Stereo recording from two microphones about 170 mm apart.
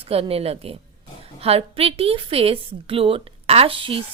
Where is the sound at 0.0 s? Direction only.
35° right (ahead or behind).